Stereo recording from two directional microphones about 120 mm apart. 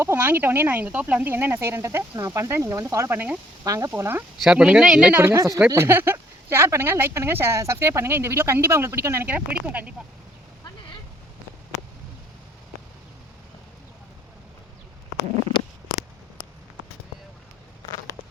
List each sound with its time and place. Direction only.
0.0 s speech: 15° right (ahead or behind)
3.6 s speech: 25° right (ahead or behind)
4.4 s speech: 10° right (ahead or behind)